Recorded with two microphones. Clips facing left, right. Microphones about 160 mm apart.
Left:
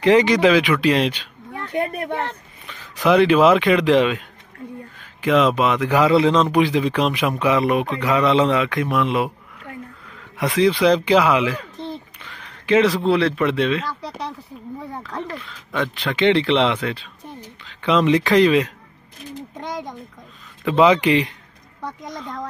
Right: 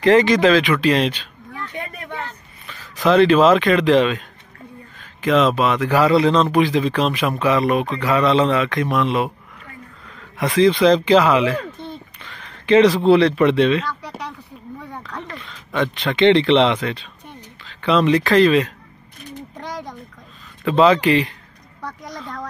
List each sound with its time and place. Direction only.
0.0 s speech: 15° left (ahead or behind)
1.6 s speech: 50° left (ahead or behind)
2.6 s a man's voice: 15° left (ahead or behind)
10.6 s a man's voice: 10° left (ahead or behind)
14.0 s speech: 35° left (ahead or behind)
15.2 s a man's voice: 5° left (ahead or behind)
17.6 s a man's voice: 15° left (ahead or behind)
19.5 s a sound: 20° left (ahead or behind)
20.6 s a man's voice: 15° left (ahead or behind)